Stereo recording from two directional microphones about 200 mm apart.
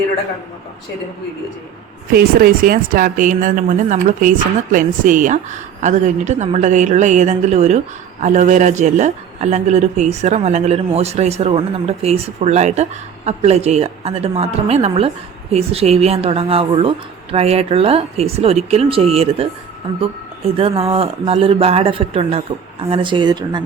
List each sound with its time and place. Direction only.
2.1 s speech: 45° right (ahead or behind); by 23.6 s 20° right (ahead or behind)